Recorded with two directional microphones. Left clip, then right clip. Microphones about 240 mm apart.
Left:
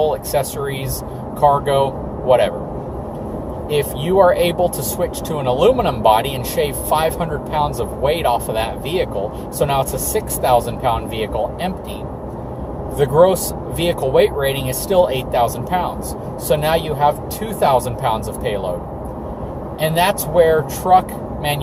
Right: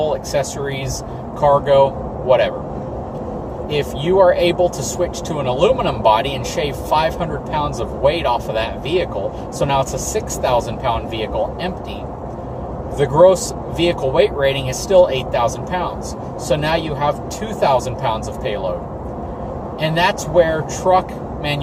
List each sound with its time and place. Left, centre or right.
0.0 s speech: centre
3.7 s speech: centre
13.0 s speech: centre
19.8 s speech: centre